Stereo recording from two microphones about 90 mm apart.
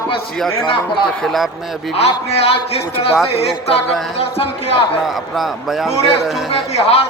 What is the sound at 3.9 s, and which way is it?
Speech, centre (ahead or behind).